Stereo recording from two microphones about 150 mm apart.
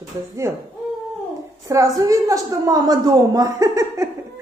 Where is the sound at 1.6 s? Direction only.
20° right (ahead or behind).